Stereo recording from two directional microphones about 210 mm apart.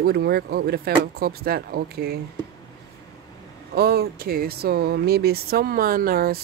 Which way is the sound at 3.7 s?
50° right (ahead or behind).